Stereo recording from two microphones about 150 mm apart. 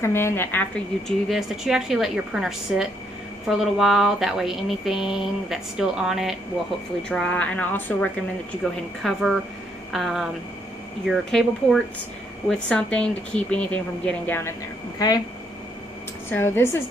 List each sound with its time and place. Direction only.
0.0 s a woman's voice: 15° left (ahead or behind); by 6.3 s 5° right (ahead or behind)
7.0 s a woman's voice: 5° left (ahead or behind)
15.0 s speech: 25° left (ahead or behind)
16.3 s speech: 15° left (ahead or behind)